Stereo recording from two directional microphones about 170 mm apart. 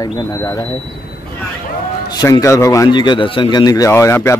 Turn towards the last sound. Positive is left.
turn(degrees=15)  # may be behind; listen again after turning